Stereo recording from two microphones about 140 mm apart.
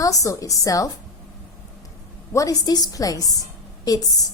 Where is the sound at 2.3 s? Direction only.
25° left (ahead or behind).